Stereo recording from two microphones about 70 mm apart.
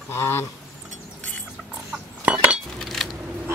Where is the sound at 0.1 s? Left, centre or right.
Left.